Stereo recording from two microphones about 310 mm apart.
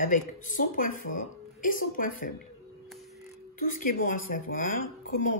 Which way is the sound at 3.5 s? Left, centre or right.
Left.